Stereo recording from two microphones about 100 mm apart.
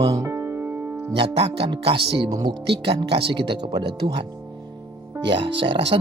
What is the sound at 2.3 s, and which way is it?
Speech, 40° right (ahead or behind).